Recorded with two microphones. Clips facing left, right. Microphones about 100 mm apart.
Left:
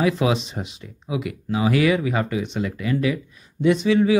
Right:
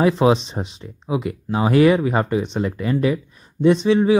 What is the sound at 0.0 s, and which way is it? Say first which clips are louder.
Speech: right 5 dB; 35° right (ahead or behind).